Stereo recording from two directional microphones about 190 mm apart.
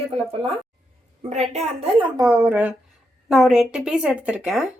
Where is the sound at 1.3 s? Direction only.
35° right (ahead or behind).